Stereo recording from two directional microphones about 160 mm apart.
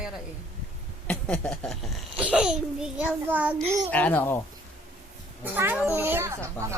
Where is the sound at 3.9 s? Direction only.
10° left (ahead or behind).